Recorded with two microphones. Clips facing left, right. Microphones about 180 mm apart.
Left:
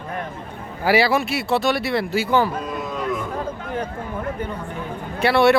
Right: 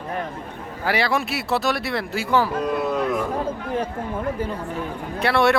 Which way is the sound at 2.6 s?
70° right (ahead or behind).